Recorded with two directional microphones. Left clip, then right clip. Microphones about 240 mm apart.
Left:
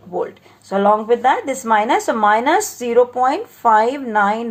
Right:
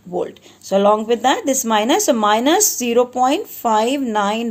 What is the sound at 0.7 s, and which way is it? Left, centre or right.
Speech, right.